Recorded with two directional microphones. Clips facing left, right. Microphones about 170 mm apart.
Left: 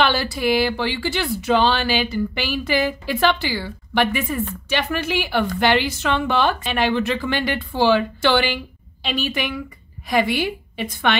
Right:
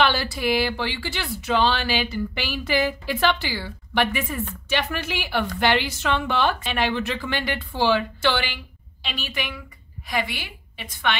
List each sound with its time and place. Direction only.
0.0 s a woman's voice: 50° left (ahead or behind)